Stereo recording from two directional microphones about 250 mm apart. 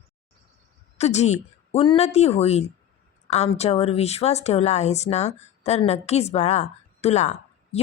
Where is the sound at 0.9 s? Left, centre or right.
Left.